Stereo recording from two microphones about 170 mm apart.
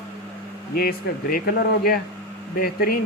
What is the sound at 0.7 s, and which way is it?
Speech, 60° left (ahead or behind).